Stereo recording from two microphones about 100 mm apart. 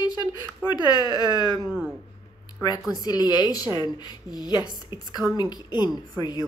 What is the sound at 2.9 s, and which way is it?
A woman's voice, 40° left (ahead or behind).